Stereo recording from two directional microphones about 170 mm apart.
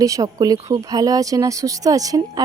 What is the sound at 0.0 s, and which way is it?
Speech, 20° right (ahead or behind).